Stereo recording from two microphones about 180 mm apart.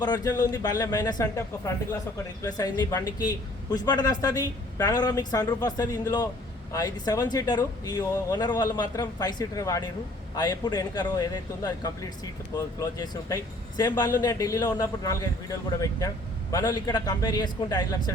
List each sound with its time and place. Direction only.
0.0 s a man's voice: 20° left (ahead or behind)